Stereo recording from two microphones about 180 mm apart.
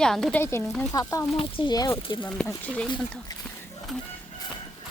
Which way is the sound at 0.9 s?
15° left (ahead or behind).